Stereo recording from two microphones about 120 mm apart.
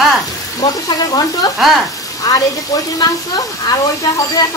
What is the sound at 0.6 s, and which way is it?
Speech, 35° left (ahead or behind).